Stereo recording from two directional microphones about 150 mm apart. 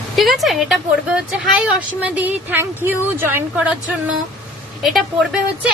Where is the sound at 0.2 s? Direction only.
Centre (ahead or behind).